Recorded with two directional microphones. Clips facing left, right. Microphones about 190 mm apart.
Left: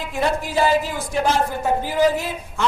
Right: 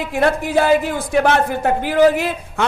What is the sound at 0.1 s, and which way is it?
A woman's voice, 60° right (ahead or behind).